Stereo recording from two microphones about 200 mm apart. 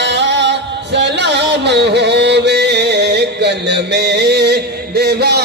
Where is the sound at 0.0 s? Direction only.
60° right (ahead or behind).